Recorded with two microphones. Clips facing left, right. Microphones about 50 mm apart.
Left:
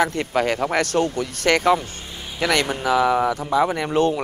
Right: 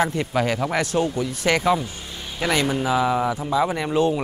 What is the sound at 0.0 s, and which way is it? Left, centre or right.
Speech, left.